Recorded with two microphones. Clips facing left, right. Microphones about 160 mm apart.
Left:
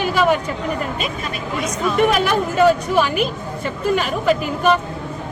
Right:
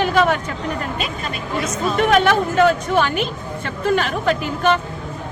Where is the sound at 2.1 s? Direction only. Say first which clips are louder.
Right 2 dB; 5° left (ahead or behind).